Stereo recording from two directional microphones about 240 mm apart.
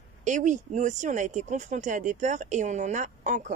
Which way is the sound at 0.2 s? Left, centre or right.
Right.